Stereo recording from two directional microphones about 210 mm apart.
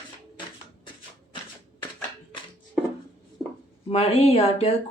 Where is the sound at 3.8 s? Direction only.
30° left (ahead or behind).